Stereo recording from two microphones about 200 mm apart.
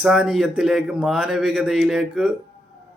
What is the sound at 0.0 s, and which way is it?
A man's voice, 5° right (ahead or behind).